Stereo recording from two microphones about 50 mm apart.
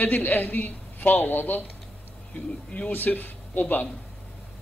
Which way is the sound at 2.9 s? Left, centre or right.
Left.